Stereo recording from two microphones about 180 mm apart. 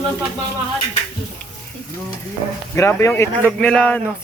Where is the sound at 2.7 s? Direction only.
15° left (ahead or behind).